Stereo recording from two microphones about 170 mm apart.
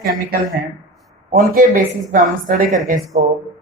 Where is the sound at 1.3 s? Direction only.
55° right (ahead or behind).